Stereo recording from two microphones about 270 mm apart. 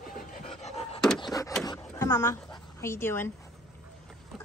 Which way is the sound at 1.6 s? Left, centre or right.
Centre.